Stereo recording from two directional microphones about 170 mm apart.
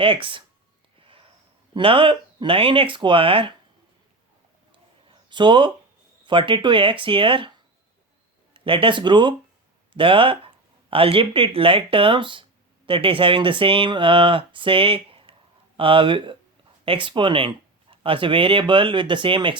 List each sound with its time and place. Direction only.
0.0 s speech: 30° right (ahead or behind)
0.9 s sniff: 30° right (ahead or behind)
1.7 s speech: 30° right (ahead or behind)
4.7 s a sound: 30° right (ahead or behind)
6.2 s speech: 30° right (ahead or behind)